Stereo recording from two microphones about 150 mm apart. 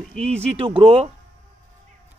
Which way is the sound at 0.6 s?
35° right (ahead or behind).